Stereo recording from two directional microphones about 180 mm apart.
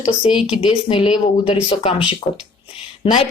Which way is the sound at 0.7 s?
30° left (ahead or behind).